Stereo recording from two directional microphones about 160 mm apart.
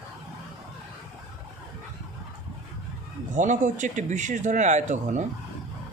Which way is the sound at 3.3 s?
50° right (ahead or behind).